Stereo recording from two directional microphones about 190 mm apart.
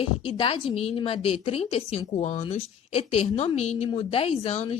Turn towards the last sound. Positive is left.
turn(degrees=30)  # may be behind; listen again after turning